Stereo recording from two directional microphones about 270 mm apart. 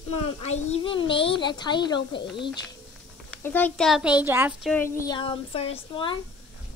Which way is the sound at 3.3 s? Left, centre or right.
Centre.